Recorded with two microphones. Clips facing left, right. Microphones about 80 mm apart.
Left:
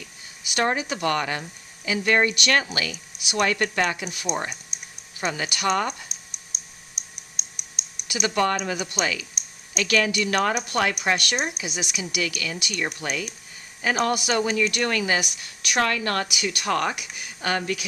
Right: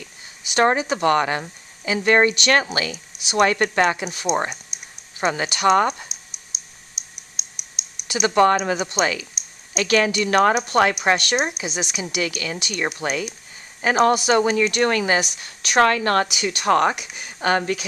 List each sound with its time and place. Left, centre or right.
0.5 s speech: right
4.7 s a sound: centre
5.2 s speech: right
6.5 s a sound: centre
7.0 s typing: centre
8.0 s speech: right
11.6 s a woman's voice: right